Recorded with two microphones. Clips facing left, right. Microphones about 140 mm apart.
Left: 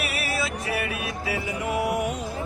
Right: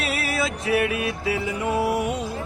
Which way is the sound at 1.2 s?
25° right (ahead or behind).